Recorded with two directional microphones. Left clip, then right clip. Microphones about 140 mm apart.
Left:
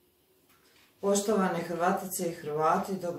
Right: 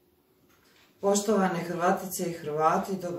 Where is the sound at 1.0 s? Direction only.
20° right (ahead or behind).